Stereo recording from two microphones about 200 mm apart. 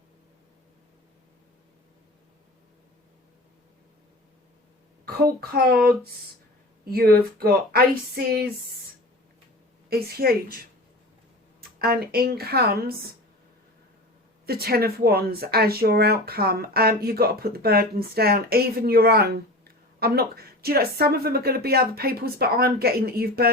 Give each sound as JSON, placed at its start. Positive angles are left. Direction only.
{"t": 5.0, "sound": "speech", "side_deg": -50}
{"t": 9.9, "sound": "speech", "side_deg": -50}
{"t": 11.8, "sound": "speech", "side_deg": -50}
{"t": 14.4, "sound": "speech", "side_deg": -50}